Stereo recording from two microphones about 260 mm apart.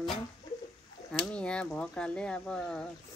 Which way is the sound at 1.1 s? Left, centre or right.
Centre.